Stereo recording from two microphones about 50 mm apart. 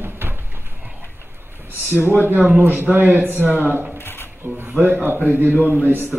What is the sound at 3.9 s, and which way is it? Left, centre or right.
Shuffling cards, left.